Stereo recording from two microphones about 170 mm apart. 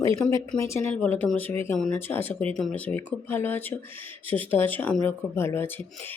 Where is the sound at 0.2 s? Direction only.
5° left (ahead or behind).